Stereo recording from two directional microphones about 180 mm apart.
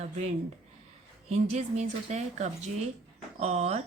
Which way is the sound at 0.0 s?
40° right (ahead or behind).